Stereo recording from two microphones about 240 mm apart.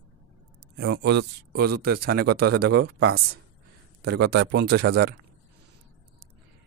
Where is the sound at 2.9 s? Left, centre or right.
Right.